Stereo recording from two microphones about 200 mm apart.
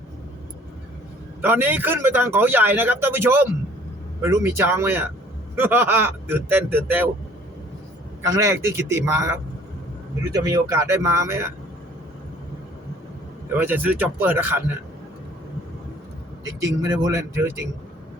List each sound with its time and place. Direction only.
1.4 s speech: 10° right (ahead or behind)
8.2 s speech: 15° right (ahead or behind)
13.6 s speech: 10° right (ahead or behind)
16.4 s speech: 15° right (ahead or behind)